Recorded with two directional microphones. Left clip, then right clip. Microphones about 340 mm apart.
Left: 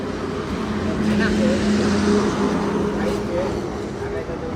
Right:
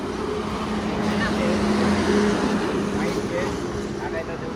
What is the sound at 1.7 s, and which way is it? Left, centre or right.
Vehicle, right.